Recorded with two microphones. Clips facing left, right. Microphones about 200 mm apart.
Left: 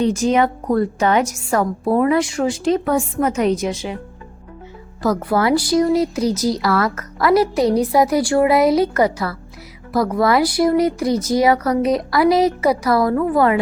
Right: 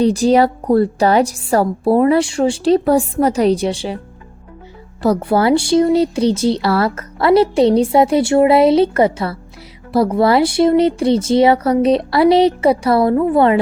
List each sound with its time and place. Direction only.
0.0 s a woman's voice: 35° right (ahead or behind)
5.0 s speech: 30° right (ahead or behind)